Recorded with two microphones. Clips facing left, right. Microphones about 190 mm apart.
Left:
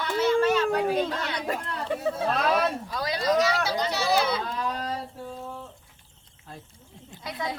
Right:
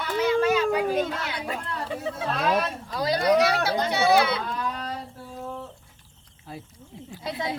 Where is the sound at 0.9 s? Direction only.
10° right (ahead or behind).